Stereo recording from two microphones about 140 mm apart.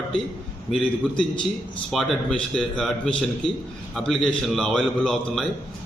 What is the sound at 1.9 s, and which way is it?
A man's voice, centre (ahead or behind).